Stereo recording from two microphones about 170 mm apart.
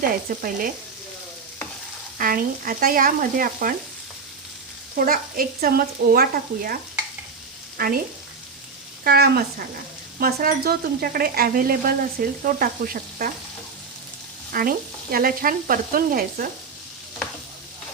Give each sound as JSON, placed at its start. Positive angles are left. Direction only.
{"t": 0.0, "sound": "stir", "side_deg": -55}
{"t": 2.1, "sound": "stir", "side_deg": -55}
{"t": 4.9, "sound": "stir", "side_deg": -55}
{"t": 7.8, "sound": "stir", "side_deg": -55}
{"t": 9.0, "sound": "stir", "side_deg": -65}
{"t": 14.5, "sound": "stir", "side_deg": -60}